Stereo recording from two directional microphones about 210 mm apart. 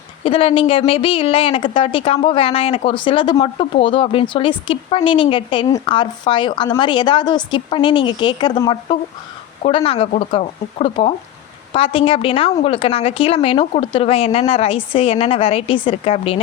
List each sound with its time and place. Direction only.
0.3 s a woman's voice: 25° left (ahead or behind)